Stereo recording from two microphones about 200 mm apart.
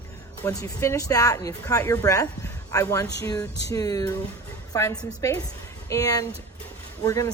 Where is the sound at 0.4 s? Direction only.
15° left (ahead or behind).